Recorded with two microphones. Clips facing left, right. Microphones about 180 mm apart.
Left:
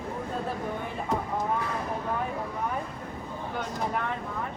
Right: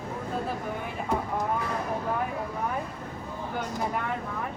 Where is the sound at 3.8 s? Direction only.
Centre (ahead or behind).